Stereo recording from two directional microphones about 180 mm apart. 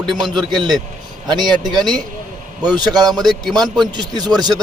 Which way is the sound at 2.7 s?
20° right (ahead or behind).